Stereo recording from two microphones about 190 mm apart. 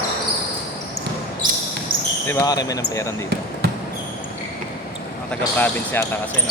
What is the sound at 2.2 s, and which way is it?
Speech, 15° left (ahead or behind).